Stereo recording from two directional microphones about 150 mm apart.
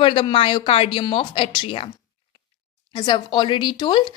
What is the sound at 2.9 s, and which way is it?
Speech, 30° left (ahead or behind).